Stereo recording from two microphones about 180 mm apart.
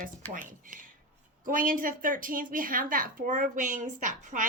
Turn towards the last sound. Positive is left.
turn(degrees=-45)  # may be behind; listen again after turning